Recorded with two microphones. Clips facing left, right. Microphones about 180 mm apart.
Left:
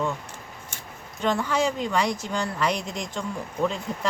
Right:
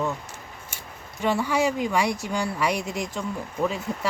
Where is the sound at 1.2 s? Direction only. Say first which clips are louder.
Right 1 dB; 10° right (ahead or behind).